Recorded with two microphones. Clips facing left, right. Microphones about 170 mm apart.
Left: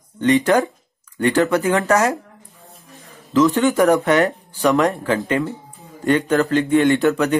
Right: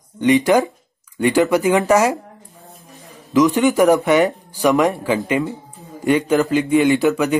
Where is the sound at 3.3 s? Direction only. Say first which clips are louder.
Right 1 dB; 15° right (ahead or behind).